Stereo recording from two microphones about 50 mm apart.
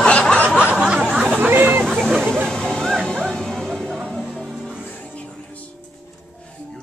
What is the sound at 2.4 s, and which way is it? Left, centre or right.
Music, centre.